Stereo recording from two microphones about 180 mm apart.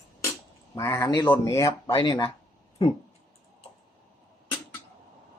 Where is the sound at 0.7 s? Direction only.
15° left (ahead or behind).